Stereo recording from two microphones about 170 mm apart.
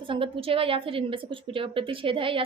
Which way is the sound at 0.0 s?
30° right (ahead or behind).